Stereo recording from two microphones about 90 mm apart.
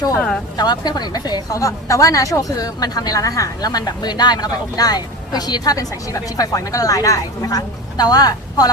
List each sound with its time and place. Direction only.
0.5 s a woman's voice: 50° left (ahead or behind)